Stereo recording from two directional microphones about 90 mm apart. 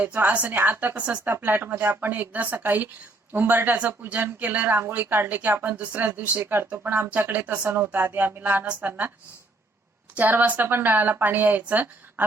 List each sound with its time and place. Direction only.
0.0 s a woman's voice: 20° right (ahead or behind)
10.2 s a woman's voice: 20° right (ahead or behind)